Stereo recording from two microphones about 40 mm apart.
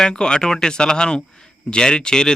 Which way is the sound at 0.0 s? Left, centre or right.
Left.